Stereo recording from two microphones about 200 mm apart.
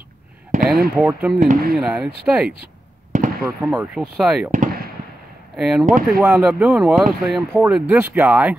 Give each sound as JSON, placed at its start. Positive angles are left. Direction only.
{"t": 0.5, "sound": "basketball bounce", "side_deg": -40}
{"t": 0.9, "sound": "speech", "side_deg": -5}
{"t": 1.4, "sound": "speech", "side_deg": -40}
{"t": 1.8, "sound": "speech", "side_deg": -5}
{"t": 2.4, "sound": "a sound", "side_deg": -45}
{"t": 3.6, "sound": "speech", "side_deg": -5}
{"t": 4.5, "sound": "fireworks", "side_deg": -40}
{"t": 5.6, "sound": "speech", "side_deg": -5}
{"t": 5.9, "sound": "speech", "side_deg": -40}
{"t": 6.2, "sound": "speech", "side_deg": -5}